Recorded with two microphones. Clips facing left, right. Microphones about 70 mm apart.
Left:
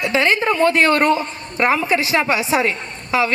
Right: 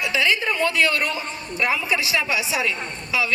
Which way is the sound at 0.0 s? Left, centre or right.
Left.